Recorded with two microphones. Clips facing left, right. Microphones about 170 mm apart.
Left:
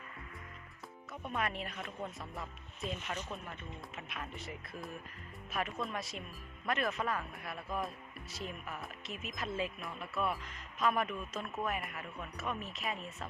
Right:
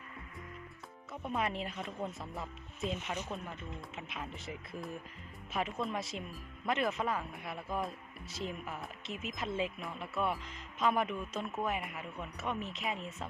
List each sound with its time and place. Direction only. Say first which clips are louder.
1.4 s speech: right 2 dB; 25° right (ahead or behind)